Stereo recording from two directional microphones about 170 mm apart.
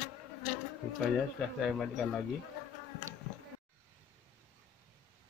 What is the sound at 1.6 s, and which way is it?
Speech, centre (ahead or behind).